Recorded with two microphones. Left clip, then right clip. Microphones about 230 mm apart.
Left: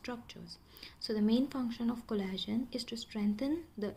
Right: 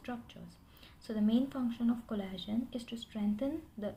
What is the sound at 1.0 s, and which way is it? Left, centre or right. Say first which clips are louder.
Speech: left 1 dB; left.